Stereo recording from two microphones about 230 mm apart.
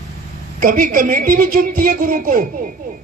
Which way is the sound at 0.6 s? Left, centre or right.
Right.